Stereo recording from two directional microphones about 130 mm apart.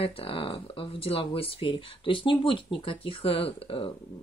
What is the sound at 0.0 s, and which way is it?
Speech, 45° left (ahead or behind).